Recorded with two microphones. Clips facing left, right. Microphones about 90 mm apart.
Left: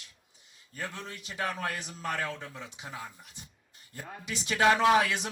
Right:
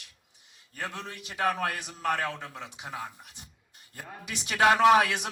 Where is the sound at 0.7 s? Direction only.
30° right (ahead or behind).